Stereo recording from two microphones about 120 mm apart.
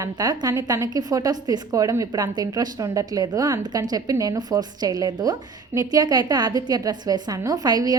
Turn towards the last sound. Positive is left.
turn(degrees=-35)  # may be behind; listen again after turning